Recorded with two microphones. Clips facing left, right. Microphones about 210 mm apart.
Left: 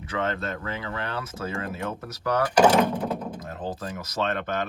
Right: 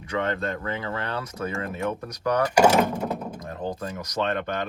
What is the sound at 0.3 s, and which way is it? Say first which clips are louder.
Speech: right 2 dB; 25° right (ahead or behind).